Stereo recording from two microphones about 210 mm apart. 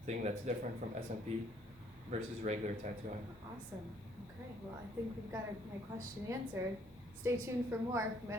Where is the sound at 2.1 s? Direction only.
35° right (ahead or behind).